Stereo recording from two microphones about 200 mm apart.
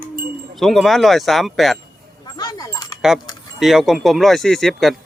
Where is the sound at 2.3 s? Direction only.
20° left (ahead or behind).